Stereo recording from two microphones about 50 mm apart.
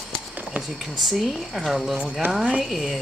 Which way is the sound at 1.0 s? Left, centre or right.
Centre.